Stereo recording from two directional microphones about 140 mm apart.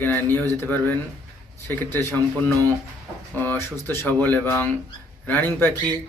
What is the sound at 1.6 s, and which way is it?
Speech, 15° left (ahead or behind).